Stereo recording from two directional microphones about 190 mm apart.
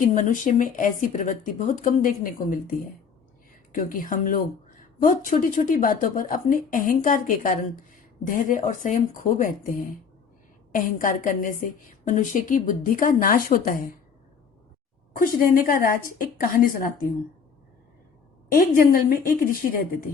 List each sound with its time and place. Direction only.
0.1 s speech: 45° left (ahead or behind)
15.1 s speech: 50° left (ahead or behind)
18.4 s speech: 50° left (ahead or behind)